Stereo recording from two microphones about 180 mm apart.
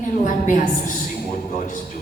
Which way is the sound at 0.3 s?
45° left (ahead or behind).